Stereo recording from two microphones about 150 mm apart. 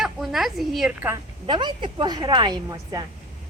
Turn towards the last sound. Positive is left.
turn(degrees=-25)  # may be behind; listen again after turning